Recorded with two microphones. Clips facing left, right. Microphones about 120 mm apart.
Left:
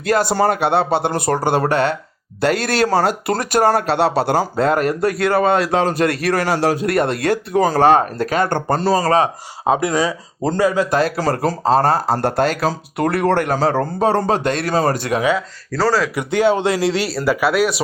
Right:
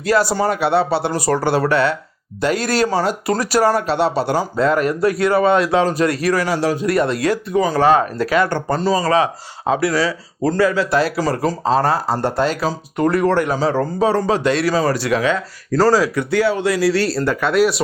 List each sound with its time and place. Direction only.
0.0 s speech: 55° left (ahead or behind)
1.4 s speech: 45° left (ahead or behind)
2.4 s speech: 65° left (ahead or behind)
5.4 s speech: 35° left (ahead or behind)
5.8 s speech: 60° left (ahead or behind)
7.7 s speech: 50° left (ahead or behind)
8.4 s speech: 60° left (ahead or behind)
9.0 s speech: 45° left (ahead or behind)
9.6 s speech: 20° left (ahead or behind)
10.9 s speech: 55° left (ahead or behind)
15.8 s speech: 10° right (ahead or behind)
16.1 s speech: 20° left (ahead or behind)
17.1 s speech: 5° left (ahead or behind)